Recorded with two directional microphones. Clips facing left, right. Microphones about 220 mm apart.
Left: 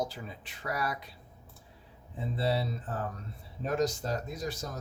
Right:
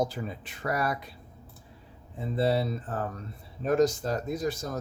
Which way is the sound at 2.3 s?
50° right (ahead or behind).